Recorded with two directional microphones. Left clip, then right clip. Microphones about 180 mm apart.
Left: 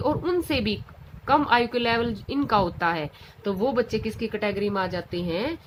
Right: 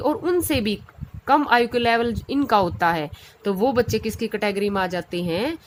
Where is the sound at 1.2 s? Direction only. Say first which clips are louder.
Right 3 dB; 40° right (ahead or behind).